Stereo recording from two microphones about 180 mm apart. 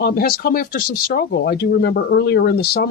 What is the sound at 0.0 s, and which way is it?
Speech, 60° left (ahead or behind).